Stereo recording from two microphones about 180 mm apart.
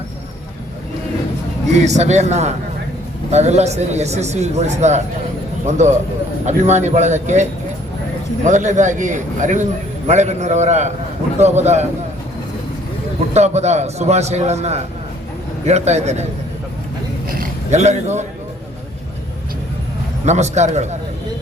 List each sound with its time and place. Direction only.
1.7 s speech: 40° right (ahead or behind)
8.4 s a man's voice: 40° right (ahead or behind)
13.3 s speech: 40° right (ahead or behind)
17.2 s a sound: 45° right (ahead or behind)
20.2 s speech: 40° right (ahead or behind)